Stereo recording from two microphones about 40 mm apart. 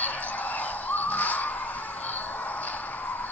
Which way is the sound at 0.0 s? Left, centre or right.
Left.